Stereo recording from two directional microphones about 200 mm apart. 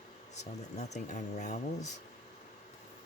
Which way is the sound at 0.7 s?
35° left (ahead or behind).